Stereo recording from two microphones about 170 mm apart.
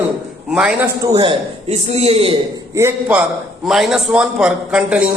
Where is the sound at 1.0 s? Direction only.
25° right (ahead or behind).